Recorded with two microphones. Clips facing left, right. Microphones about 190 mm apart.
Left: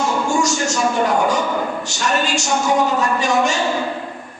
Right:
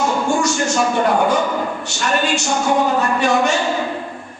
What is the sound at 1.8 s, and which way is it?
A man's voice, 60° right (ahead or behind).